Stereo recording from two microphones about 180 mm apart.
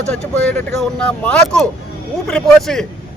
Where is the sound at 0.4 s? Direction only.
5° left (ahead or behind).